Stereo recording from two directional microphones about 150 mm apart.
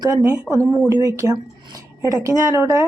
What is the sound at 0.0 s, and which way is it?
Speech, 20° right (ahead or behind).